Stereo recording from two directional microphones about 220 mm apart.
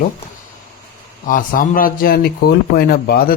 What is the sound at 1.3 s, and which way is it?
A man's voice, 40° left (ahead or behind).